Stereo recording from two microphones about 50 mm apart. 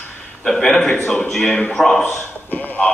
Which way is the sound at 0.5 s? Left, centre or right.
Centre.